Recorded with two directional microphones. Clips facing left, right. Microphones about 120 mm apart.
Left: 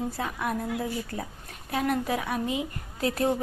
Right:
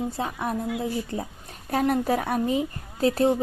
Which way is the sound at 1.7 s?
40° right (ahead or behind).